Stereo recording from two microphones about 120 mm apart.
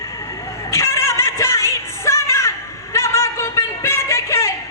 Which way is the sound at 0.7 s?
25° left (ahead or behind).